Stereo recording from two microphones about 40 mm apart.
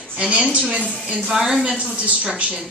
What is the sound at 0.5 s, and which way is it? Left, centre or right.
A woman's voice, centre.